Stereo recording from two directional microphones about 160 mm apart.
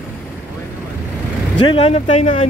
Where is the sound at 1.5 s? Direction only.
30° left (ahead or behind).